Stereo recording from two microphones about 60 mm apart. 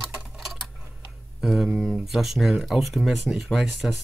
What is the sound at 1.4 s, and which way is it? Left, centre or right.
Speech, centre.